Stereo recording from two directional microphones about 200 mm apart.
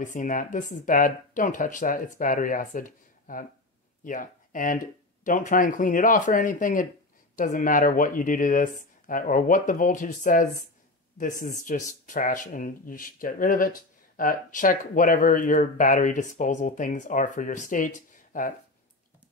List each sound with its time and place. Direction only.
0.0 s speech: 40° left (ahead or behind)